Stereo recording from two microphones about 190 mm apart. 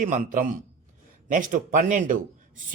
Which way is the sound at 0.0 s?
45° right (ahead or behind).